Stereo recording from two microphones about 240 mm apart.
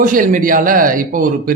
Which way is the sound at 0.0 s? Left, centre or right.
Right.